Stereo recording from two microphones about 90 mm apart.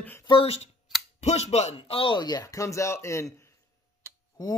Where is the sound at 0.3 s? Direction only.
90° left.